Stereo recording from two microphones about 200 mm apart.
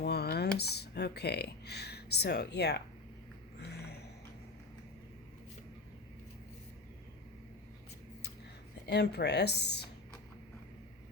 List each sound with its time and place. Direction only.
0.0 s speech: 55° left (ahead or behind)
3.7 s a sound: 55° left (ahead or behind)
8.9 s speech: 55° left (ahead or behind)